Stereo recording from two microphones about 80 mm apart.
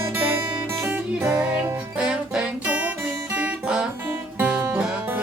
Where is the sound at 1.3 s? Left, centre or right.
Centre.